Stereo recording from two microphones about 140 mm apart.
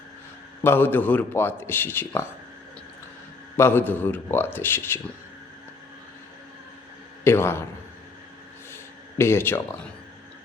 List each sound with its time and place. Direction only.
0.6 s a man's voice: 15° left (ahead or behind)
3.6 s a man's voice: 15° left (ahead or behind)
7.3 s a man's voice: 15° left (ahead or behind)
8.7 s a sound: 15° left (ahead or behind)